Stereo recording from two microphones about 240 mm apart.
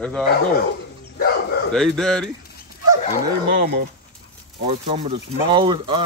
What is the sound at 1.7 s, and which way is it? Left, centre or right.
Speech, centre.